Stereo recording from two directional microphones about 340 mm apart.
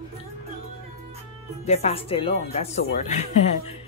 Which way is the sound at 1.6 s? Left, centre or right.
Centre.